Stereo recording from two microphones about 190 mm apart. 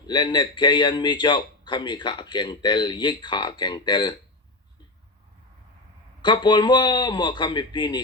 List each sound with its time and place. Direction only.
0.0 s speech: 25° left (ahead or behind)
6.2 s speech: 25° left (ahead or behind)